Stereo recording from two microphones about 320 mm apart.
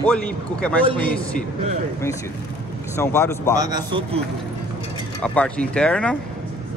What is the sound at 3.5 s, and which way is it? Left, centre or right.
Speech, centre.